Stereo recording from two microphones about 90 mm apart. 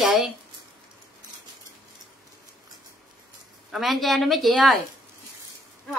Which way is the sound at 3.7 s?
Centre (ahead or behind).